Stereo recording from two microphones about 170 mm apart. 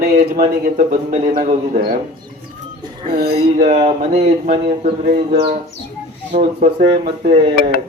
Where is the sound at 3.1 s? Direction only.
70° right (ahead or behind).